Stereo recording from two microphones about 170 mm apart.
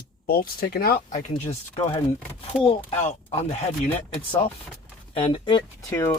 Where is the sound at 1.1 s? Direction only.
45° left (ahead or behind).